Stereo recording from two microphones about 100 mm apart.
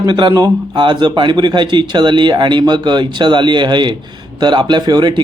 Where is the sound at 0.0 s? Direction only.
50° right (ahead or behind).